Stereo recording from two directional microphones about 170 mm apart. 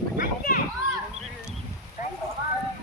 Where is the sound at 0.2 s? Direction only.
55° left (ahead or behind).